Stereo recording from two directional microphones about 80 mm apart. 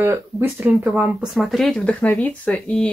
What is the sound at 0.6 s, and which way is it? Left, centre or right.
Speech, centre.